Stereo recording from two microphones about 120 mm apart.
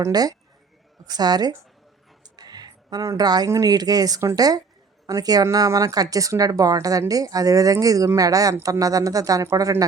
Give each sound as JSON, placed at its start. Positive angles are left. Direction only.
{"t": 0.0, "sound": "a woman's voice", "side_deg": -35}